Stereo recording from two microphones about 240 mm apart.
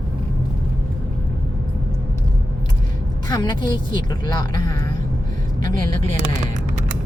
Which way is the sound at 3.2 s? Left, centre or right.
Centre.